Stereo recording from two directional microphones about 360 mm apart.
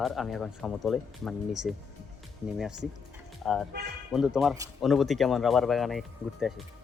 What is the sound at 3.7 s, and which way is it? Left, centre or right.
Speech, right.